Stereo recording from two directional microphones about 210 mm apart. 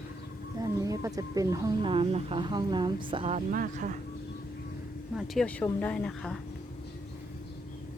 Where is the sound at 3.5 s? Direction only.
40° right (ahead or behind).